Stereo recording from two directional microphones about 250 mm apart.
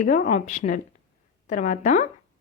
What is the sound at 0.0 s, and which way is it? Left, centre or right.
A woman's voice, left.